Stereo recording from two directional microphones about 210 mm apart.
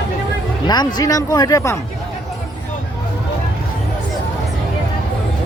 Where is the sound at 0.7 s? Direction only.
20° left (ahead or behind).